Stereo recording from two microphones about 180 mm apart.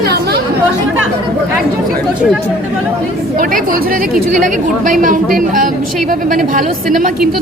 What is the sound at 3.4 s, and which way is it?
A woman's voice, 50° right (ahead or behind).